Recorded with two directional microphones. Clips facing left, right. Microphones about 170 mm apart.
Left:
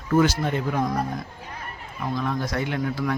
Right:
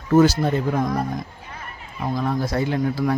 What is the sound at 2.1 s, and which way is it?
Speech, 30° right (ahead or behind).